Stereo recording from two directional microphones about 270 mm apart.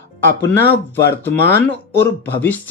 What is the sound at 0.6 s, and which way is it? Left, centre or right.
Speech, left.